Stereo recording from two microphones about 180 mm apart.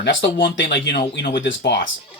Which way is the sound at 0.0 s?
75° left (ahead or behind).